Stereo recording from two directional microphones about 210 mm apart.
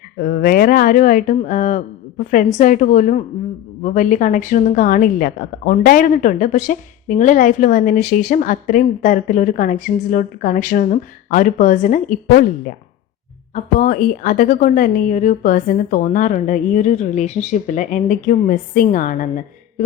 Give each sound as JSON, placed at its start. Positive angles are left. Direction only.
{"t": 0.2, "sound": "a woman's voice", "side_deg": 45}